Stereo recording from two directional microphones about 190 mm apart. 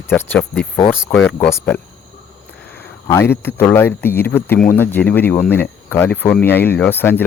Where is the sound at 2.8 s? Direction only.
10° left (ahead or behind).